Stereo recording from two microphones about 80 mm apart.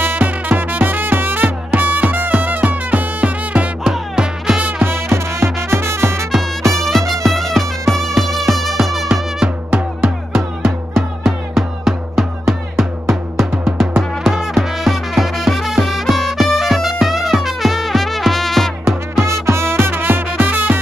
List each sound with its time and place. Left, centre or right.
0.0 s music: right
3.8 s music: centre
4.6 s music: right
6.7 s music: centre
9.7 s music: right
10.6 s music: centre
14.2 s music: centre
18.9 s music: right